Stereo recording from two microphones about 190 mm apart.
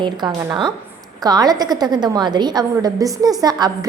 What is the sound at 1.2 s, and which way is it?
A woman's voice, 20° right (ahead or behind).